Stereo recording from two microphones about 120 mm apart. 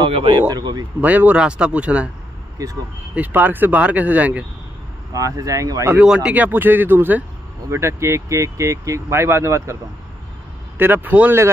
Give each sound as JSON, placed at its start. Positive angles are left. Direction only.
{"t": 0.1, "sound": "speech", "side_deg": -45}
{"t": 1.0, "sound": "speech", "side_deg": -10}
{"t": 2.6, "sound": "speech", "side_deg": -30}
{"t": 3.2, "sound": "speech", "side_deg": -15}
{"t": 5.1, "sound": "speech", "side_deg": -30}
{"t": 5.9, "sound": "speech", "side_deg": -10}
{"t": 10.8, "sound": "speech", "side_deg": -15}